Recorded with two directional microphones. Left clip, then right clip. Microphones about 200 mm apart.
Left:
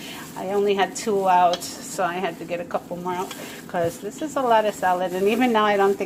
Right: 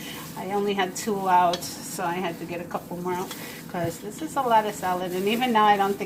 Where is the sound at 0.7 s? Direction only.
40° left (ahead or behind).